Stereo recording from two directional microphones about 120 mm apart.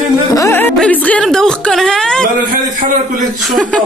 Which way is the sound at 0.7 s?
10° left (ahead or behind).